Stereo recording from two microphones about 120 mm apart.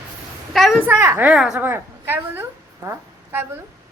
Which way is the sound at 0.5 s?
Centre (ahead or behind).